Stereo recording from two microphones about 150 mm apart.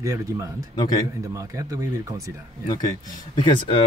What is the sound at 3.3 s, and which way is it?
Speech, 30° left (ahead or behind).